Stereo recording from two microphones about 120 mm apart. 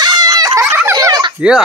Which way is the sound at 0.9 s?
35° right (ahead or behind).